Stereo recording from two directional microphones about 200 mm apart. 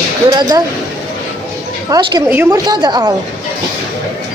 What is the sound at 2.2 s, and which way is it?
Speech, 10° right (ahead or behind).